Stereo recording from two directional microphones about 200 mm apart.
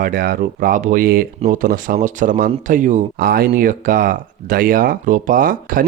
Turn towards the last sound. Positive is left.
turn(degrees=-45)  # may be behind; listen again after turning